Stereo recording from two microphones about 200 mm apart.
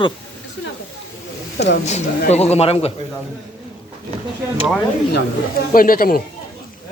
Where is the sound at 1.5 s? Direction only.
60° left (ahead or behind).